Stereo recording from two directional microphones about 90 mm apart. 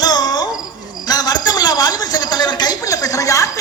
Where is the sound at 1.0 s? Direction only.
50° left (ahead or behind).